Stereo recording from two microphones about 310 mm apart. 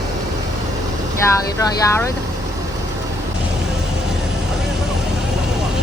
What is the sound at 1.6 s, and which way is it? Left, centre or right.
Speech, centre.